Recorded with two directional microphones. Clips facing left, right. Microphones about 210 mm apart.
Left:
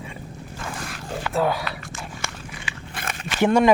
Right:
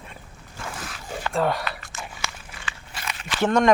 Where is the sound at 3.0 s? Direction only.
55° left (ahead or behind).